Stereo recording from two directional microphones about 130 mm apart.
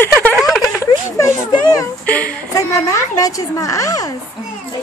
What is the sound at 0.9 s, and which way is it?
Speech, 30° left (ahead or behind).